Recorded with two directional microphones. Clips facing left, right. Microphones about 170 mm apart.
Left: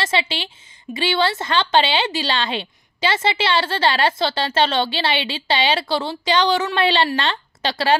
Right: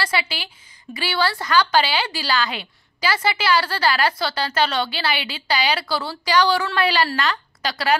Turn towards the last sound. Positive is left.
turn(degrees=25)  # may be behind; listen again after turning